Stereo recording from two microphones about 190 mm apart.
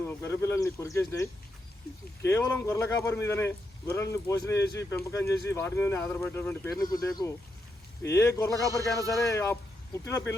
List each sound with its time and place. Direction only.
0.1 s a man's voice: 15° left (ahead or behind)